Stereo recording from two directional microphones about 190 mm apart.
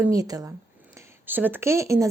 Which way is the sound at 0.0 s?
20° right (ahead or behind).